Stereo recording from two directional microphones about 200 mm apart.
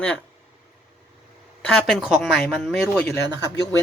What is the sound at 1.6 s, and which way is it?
Speech, centre (ahead or behind).